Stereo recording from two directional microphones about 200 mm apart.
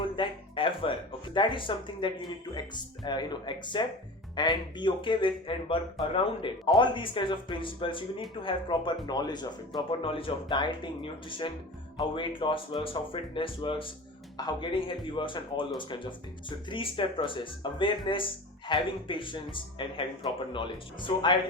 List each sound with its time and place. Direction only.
0.0 s speech: 25° left (ahead or behind)